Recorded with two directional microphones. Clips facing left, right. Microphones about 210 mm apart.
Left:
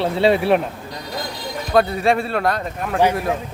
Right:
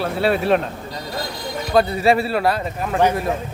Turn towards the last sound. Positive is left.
turn(degrees=0)  # may be behind; listen again after turning